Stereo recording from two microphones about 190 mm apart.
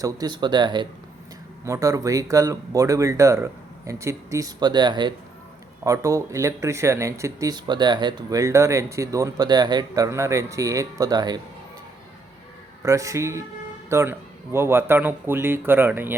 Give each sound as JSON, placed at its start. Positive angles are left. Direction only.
{"t": 0.0, "sound": "speech", "side_deg": -20}
{"t": 12.8, "sound": "speech", "side_deg": -15}